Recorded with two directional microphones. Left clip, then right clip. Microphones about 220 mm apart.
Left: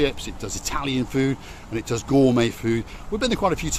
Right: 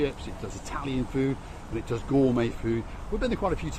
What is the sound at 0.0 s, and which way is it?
Speech, 50° left (ahead or behind).